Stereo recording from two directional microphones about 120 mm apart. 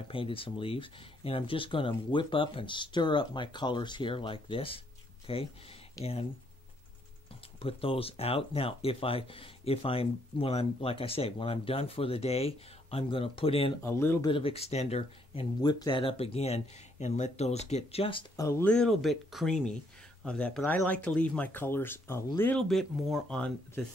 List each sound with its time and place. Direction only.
0.1 s speech: 50° left (ahead or behind)
6.0 s speech: 30° left (ahead or behind)
7.6 s speech: 50° left (ahead or behind)
13.8 s speech: 20° left (ahead or behind)
14.2 s speech: 50° left (ahead or behind)
15.6 s speech: 35° left (ahead or behind); by 18.2 s 55° left (ahead or behind)
18.3 s speech: 25° left (ahead or behind)
18.6 s speech: 5° left (ahead or behind)
22.6 s speech: centre (ahead or behind)